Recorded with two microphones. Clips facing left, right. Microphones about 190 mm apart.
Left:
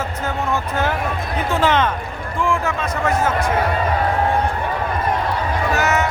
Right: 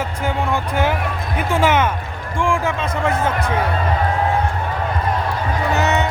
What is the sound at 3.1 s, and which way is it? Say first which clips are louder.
Music: left 1 dB; 60° right (ahead or behind).